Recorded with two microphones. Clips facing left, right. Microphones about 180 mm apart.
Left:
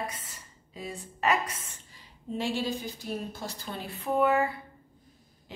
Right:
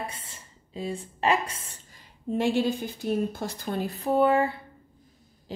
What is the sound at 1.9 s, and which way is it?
A woman's voice, 55° right (ahead or behind).